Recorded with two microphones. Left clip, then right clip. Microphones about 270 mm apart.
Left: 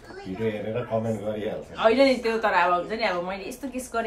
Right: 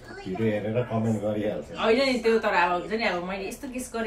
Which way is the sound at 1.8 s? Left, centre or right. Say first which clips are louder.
Left 4 dB; centre.